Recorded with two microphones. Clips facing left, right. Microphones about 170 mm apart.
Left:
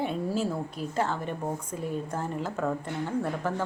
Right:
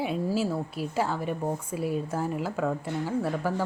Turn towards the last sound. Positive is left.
turn(degrees=-5)  # may be behind; listen again after turning